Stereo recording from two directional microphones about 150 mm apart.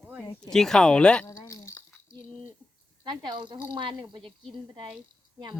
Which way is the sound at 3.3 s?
30° right (ahead or behind).